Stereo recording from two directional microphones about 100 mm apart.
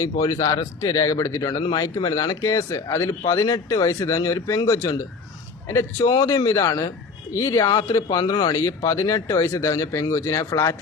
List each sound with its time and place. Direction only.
0.0 s speech: 35° left (ahead or behind)
6.0 s speech: 40° left (ahead or behind)